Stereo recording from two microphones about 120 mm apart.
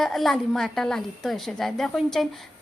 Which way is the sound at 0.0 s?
Centre (ahead or behind).